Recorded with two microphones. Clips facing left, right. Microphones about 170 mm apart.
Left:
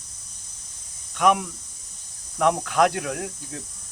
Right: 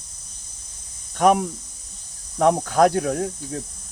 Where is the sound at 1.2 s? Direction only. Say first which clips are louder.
Right 3 dB; 35° right (ahead or behind).